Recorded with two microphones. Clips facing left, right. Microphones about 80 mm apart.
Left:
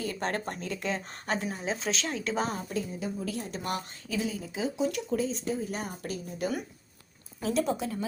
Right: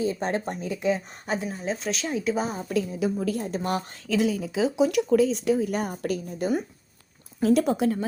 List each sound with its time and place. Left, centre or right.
0.0 s speech: centre
2.6 s speech: right
3.3 s a woman's voice: right
3.6 s speech: right
4.1 s speech: right
5.7 s a woman's voice: right
7.4 s speech: right